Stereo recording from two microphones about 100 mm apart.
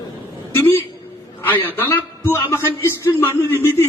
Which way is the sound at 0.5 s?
20° left (ahead or behind).